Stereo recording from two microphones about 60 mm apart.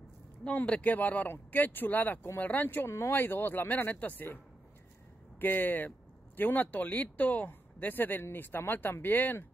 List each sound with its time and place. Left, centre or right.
0.6 s speech: left
5.4 s speech: left